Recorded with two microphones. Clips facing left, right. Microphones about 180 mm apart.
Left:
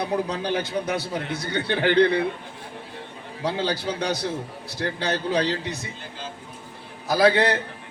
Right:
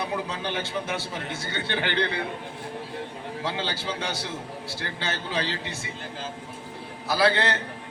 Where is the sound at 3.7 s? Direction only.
40° left (ahead or behind).